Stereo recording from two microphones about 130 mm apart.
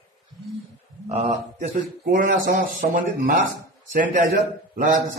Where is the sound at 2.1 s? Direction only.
90° right.